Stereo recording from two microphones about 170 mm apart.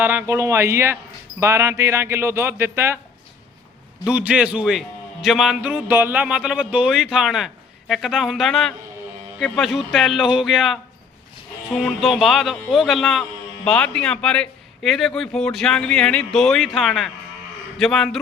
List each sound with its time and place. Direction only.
0.0 s speech: 10° right (ahead or behind)
4.0 s a man's voice: 5° right (ahead or behind)